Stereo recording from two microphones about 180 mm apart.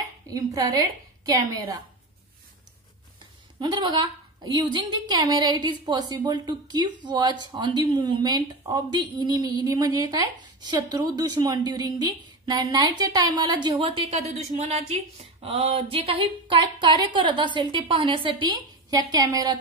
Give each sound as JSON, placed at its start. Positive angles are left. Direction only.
{"t": 0.3, "sound": "a woman's voice", "side_deg": -20}
{"t": 3.5, "sound": "a woman's voice", "side_deg": -25}
{"t": 14.6, "sound": "a woman's voice", "side_deg": -40}